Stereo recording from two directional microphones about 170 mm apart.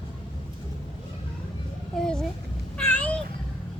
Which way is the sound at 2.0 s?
5° left (ahead or behind).